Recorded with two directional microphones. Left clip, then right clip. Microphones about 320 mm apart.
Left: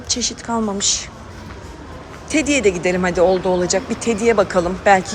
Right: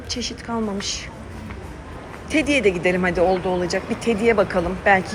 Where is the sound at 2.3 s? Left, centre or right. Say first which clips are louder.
Left 2 dB; centre.